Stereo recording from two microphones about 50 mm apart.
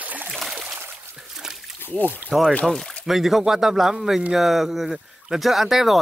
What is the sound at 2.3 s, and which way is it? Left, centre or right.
Speech, centre.